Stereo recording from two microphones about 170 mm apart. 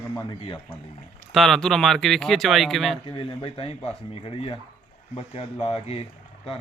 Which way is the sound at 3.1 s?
30° left (ahead or behind).